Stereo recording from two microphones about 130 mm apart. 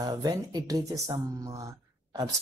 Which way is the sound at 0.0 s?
30° right (ahead or behind).